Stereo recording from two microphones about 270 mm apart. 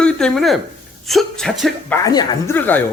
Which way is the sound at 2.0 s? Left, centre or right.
Centre.